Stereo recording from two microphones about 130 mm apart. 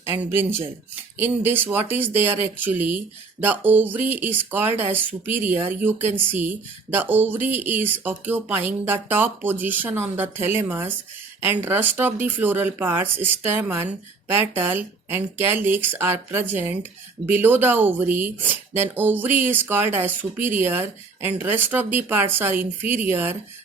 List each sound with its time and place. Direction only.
0.2 s speech: 15° right (ahead or behind)